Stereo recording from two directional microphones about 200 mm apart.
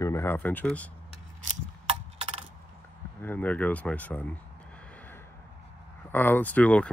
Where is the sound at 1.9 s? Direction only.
30° right (ahead or behind).